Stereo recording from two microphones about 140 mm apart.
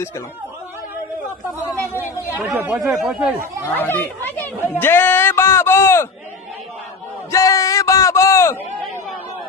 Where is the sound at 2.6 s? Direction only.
15° right (ahead or behind).